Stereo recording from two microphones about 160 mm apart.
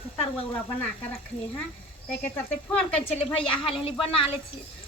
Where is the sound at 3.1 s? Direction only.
35° left (ahead or behind).